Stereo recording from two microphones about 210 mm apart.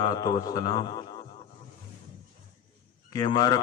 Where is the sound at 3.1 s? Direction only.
20° left (ahead or behind).